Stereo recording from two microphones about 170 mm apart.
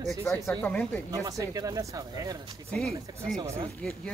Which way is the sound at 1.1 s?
20° right (ahead or behind).